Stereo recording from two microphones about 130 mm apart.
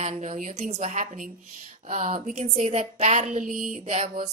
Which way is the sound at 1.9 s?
50° right (ahead or behind).